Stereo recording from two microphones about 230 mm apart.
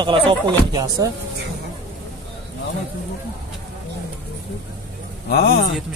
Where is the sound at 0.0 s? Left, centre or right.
Right.